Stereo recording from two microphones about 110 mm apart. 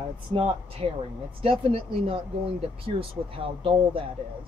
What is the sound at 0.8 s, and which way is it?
Speech, 65° right (ahead or behind).